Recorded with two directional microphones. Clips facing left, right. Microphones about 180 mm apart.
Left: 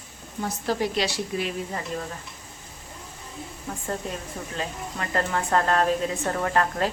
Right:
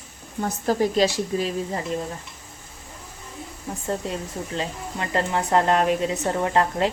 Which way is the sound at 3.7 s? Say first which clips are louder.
Right 4 dB; 20° right (ahead or behind).